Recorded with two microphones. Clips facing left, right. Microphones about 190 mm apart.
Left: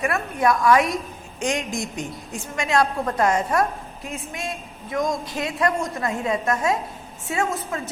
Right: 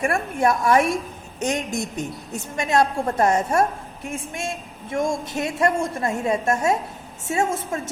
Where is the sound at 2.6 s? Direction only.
25° right (ahead or behind).